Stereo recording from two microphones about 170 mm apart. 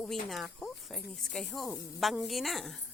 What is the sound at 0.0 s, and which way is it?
Speech, centre (ahead or behind).